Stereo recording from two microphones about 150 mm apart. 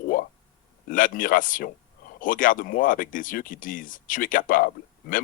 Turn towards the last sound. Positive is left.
turn(degrees=65)  # may be behind; listen again after turning